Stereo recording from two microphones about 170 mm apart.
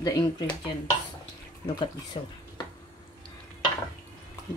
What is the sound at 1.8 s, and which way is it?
Speech, 25° left (ahead or behind).